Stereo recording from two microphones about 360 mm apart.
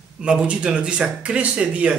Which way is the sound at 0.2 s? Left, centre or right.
Centre.